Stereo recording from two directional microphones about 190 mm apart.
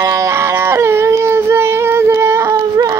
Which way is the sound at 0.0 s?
15° right (ahead or behind).